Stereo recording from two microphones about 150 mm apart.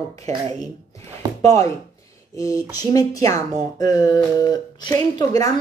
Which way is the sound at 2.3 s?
20° left (ahead or behind).